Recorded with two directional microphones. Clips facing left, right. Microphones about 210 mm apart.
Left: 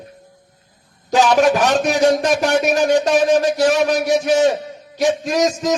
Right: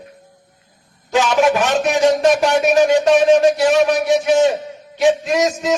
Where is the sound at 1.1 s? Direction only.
40° left (ahead or behind).